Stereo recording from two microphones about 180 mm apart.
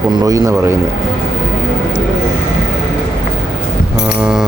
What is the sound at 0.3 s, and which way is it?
Speech, 20° right (ahead or behind).